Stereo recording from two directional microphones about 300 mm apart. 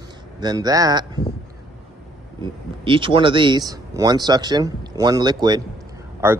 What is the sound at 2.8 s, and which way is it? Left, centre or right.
Speech, centre.